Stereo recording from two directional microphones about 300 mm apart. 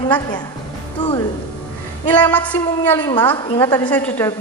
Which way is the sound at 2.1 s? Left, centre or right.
Centre.